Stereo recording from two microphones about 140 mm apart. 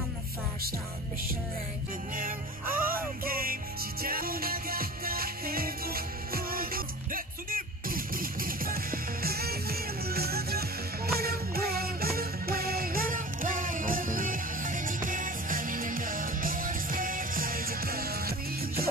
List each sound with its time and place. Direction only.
2.1 s music: 85° right